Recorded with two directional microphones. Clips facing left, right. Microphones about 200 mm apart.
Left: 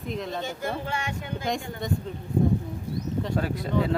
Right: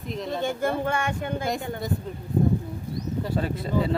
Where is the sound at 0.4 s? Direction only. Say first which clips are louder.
Right 6 dB; 55° right (ahead or behind).